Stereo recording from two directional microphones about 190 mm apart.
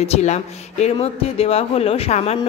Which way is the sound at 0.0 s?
35° left (ahead or behind).